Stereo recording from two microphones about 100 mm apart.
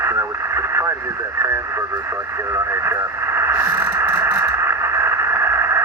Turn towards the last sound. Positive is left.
turn(degrees=-25)  # may be behind; listen again after turning